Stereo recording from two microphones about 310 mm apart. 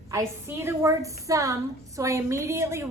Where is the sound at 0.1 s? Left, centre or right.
Centre.